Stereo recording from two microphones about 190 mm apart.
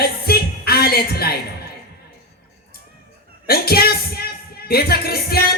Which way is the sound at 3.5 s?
55° left (ahead or behind).